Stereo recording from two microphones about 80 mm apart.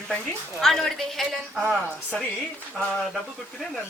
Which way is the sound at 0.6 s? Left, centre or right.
Centre.